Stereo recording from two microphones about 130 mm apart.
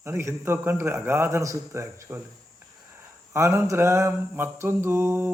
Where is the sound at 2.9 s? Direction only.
20° right (ahead or behind).